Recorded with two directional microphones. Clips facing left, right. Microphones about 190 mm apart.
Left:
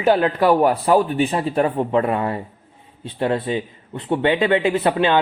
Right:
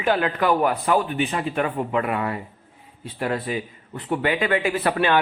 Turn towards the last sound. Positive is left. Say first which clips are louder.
# left 4 dB
turn(degrees=20)  # may be behind; listen again after turning